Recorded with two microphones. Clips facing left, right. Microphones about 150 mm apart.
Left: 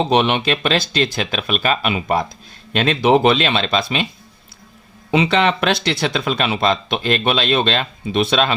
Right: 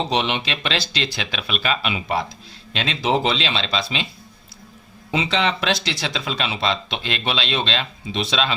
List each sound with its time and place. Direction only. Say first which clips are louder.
0.1 s speech: left 6 dB; 55° left (ahead or behind)
5.1 s speech: left 6 dB; 60° left (ahead or behind)